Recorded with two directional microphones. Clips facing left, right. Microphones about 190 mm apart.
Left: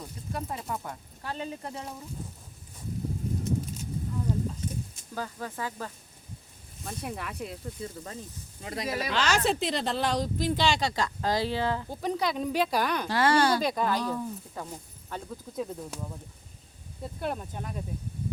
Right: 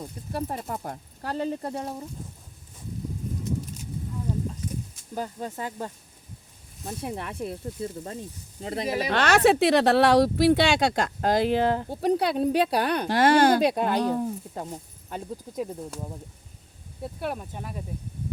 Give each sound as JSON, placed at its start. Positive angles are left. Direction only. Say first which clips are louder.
{"t": 0.3, "sound": "speech", "louder": "right 4 dB", "side_deg": -35}
{"t": 5.1, "sound": "speech", "louder": "right 3 dB", "side_deg": -20}
{"t": 7.2, "sound": "speech", "louder": "right 3 dB", "side_deg": -25}
{"t": 8.6, "sound": "speech", "louder": "right 5 dB", "side_deg": -25}
{"t": 9.0, "sound": "speech", "louder": "right 8 dB", "side_deg": -60}
{"t": 12.4, "sound": "speech", "louder": "right 4 dB", "side_deg": -35}
{"t": 13.0, "sound": "speech", "louder": "right 6 dB", "side_deg": -55}
{"t": 17.0, "sound": "speech", "louder": "right 2 dB", "side_deg": -5}